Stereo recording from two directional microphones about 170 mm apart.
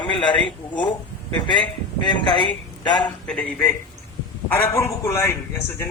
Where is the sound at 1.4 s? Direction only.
25° left (ahead or behind).